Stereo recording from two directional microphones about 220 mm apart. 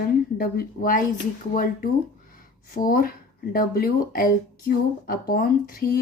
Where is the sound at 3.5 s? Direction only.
40° left (ahead or behind).